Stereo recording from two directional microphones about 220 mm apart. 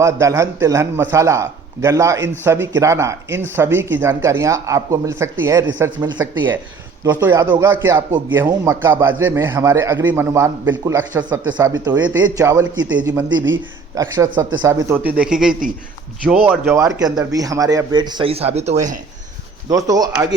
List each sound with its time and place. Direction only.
0.0 s a man's voice: 15° right (ahead or behind); by 18.9 s 30° right (ahead or behind)
19.6 s speech: 15° right (ahead or behind)